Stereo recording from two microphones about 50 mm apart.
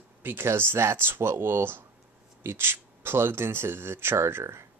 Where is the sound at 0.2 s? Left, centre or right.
Right.